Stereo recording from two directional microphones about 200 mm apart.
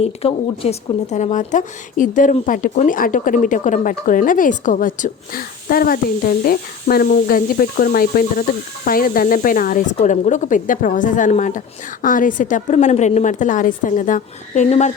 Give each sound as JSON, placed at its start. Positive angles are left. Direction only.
{"t": 0.0, "sound": "speech", "side_deg": 30}